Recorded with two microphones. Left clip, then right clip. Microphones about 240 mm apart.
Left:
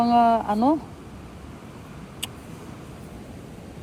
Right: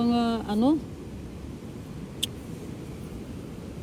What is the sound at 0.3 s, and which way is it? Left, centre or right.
Speech, left.